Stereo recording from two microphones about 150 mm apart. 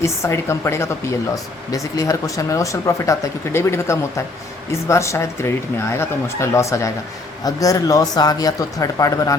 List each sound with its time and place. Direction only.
0.0 s speech: 20° left (ahead or behind)